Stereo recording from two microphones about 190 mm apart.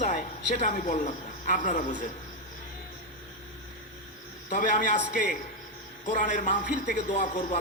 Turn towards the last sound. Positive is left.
turn(degrees=40)  # may be behind; listen again after turning